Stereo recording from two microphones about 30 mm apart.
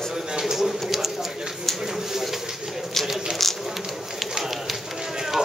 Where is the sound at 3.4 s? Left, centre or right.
Centre.